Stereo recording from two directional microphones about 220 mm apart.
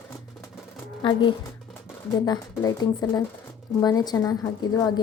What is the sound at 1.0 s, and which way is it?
A woman's voice, 20° left (ahead or behind).